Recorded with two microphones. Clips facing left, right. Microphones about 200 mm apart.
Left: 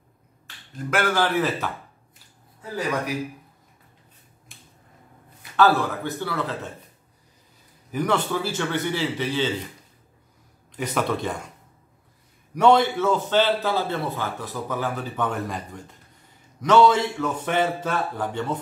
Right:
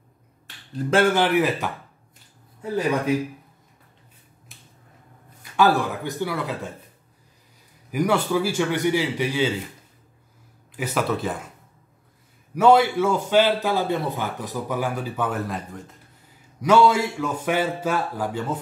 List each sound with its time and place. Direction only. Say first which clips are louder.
0.8 s speech: right 4 dB; 25° right (ahead or behind)
4.5 s a sound: left 1 dB; centre (ahead or behind)
5.6 s a man's voice: even; 15° right (ahead or behind)
7.9 s a man's voice: right 3 dB; 10° right (ahead or behind)
10.8 s speech: right 1 dB; 5° right (ahead or behind)
12.5 s a man's voice: right 1 dB; 10° right (ahead or behind)